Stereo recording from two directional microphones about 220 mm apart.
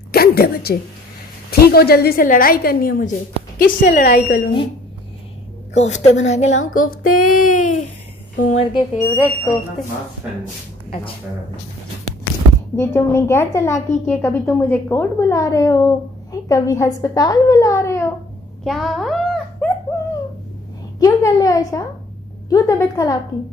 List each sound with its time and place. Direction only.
0.1 s a sound: 45° left (ahead or behind)
1.5 s a woman's voice: 45° left (ahead or behind)
5.8 s a woman's voice: 30° left (ahead or behind)
8.7 s speech: 25° left (ahead or behind)
12.7 s a woman's voice: 10° left (ahead or behind)
18.6 s dog: centre (ahead or behind)
21.0 s a woman's voice: 15° left (ahead or behind)